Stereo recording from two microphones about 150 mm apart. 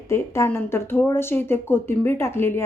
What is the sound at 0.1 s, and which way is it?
A woman's voice, 15° left (ahead or behind).